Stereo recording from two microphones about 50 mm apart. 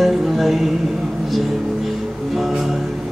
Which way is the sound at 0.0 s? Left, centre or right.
Centre.